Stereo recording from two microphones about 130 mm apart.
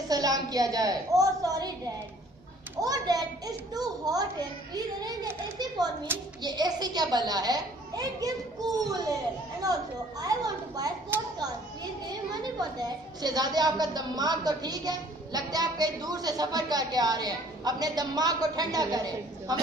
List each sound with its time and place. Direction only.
0.1 s a woman's voice: 30° right (ahead or behind)
2.8 s a child's voice: 30° right (ahead or behind)
6.1 s a child's voice: 15° right (ahead or behind)
6.4 s a child's voice: 30° right (ahead or behind)
11.1 s a child's voice: 15° right (ahead or behind)
12.4 s a woman's voice: 30° right (ahead or behind)